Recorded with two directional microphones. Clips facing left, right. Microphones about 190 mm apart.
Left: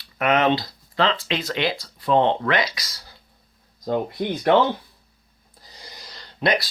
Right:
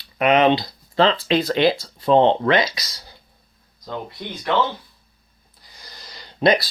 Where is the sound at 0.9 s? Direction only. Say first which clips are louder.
Right 5 dB; 35° right (ahead or behind).